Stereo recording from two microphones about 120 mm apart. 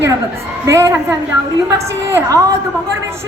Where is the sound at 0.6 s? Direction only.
25° right (ahead or behind).